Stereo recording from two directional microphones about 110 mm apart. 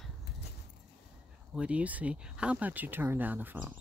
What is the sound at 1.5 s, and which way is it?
Speech, 10° right (ahead or behind).